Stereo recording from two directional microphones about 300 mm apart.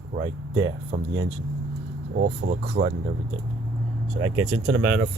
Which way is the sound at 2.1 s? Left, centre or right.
Right.